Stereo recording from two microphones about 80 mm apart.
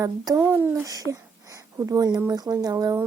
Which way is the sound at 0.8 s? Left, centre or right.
Right.